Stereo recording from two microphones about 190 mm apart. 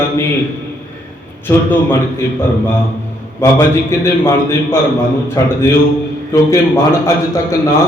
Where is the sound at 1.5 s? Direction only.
10° left (ahead or behind).